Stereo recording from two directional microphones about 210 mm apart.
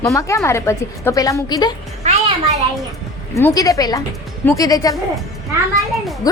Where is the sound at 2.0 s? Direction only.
30° right (ahead or behind).